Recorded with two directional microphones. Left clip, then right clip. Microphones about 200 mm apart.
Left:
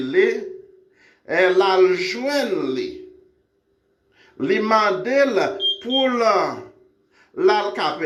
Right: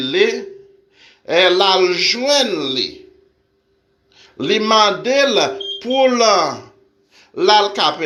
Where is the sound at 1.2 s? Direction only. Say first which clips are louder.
Right 4 dB; 50° right (ahead or behind).